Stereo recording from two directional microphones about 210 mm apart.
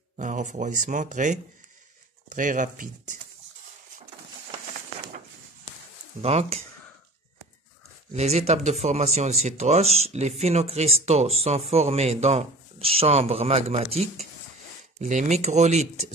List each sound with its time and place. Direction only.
0.2 s speech: 35° right (ahead or behind)
6.2 s speech: 30° right (ahead or behind)
8.1 s speech: 30° right (ahead or behind)